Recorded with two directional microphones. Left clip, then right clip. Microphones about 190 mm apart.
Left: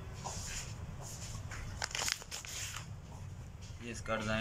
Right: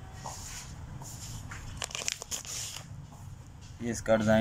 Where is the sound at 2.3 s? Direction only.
35° right (ahead or behind).